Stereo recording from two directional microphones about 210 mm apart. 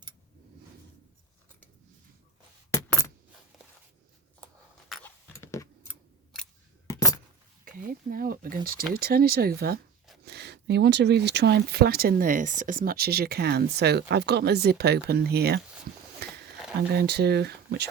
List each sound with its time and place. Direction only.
2.7 s coin: 15° left (ahead or behind)
4.9 s a sound: centre (ahead or behind)
5.3 s keys jangling: 15° left (ahead or behind)
6.8 s keys jangling: 15° left (ahead or behind)
7.6 s speech: 40° right (ahead or behind)
16.2 s a sound: 50° right (ahead or behind)
16.9 s speech: 50° right (ahead or behind)